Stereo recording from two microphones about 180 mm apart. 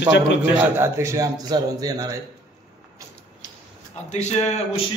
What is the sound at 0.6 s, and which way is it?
A man's voice, 15° right (ahead or behind).